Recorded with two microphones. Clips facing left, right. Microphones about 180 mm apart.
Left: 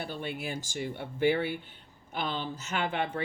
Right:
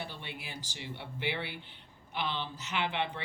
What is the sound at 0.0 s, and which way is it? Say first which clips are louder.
Speech: left 7 dB; 50° left (ahead or behind).